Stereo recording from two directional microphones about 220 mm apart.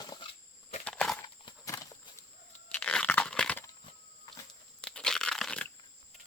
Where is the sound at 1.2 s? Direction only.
15° left (ahead or behind).